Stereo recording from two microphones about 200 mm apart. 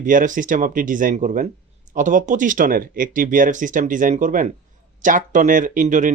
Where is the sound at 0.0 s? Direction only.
40° right (ahead or behind).